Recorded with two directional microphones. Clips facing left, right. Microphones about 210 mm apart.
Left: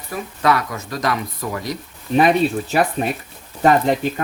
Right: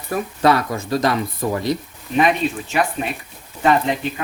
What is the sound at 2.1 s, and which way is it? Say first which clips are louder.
Speech: left 3 dB; 35° left (ahead or behind).